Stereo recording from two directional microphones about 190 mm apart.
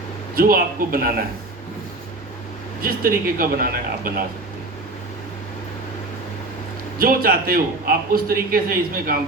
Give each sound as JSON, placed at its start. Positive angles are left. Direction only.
{"t": 0.3, "sound": "a man's voice", "side_deg": -50}
{"t": 2.8, "sound": "a man's voice", "side_deg": -50}
{"t": 7.0, "sound": "a man's voice", "side_deg": -50}